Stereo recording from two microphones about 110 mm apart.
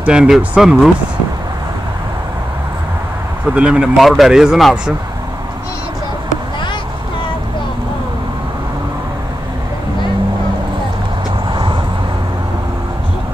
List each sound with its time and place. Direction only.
0.0 s speech: 5° right (ahead or behind)
3.5 s speech: 10° right (ahead or behind)
11.5 s vehicle: 45° right (ahead or behind)